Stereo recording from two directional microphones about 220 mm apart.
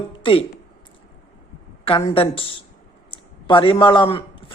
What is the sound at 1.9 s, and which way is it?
A man's voice, 25° left (ahead or behind).